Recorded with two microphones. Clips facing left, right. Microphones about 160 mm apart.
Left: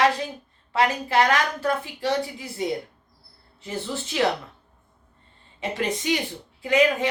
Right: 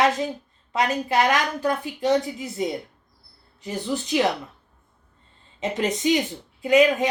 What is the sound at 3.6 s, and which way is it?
Speech, 15° right (ahead or behind).